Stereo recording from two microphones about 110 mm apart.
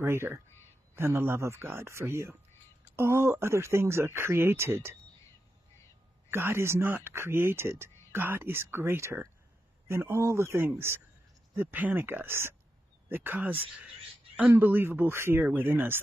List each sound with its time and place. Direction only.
0.0 s speech: 25° right (ahead or behind)
6.3 s speech: 20° right (ahead or behind)